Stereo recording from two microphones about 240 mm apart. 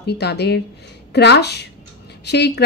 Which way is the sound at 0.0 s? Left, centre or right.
Left.